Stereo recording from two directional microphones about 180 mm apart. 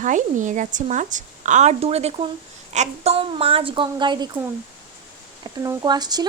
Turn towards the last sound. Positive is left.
turn(degrees=-20)  # may be behind; listen again after turning